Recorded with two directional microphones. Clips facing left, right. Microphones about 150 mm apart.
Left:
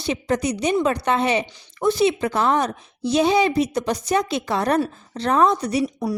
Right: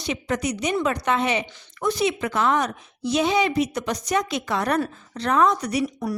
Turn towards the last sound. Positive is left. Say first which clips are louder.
# left 2 dB
turn(degrees=30)  # may be behind; listen again after turning